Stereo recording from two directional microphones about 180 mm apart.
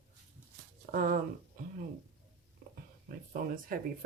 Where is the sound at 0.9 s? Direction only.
50° right (ahead or behind).